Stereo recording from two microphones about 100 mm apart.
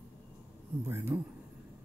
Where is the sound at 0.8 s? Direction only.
25° right (ahead or behind).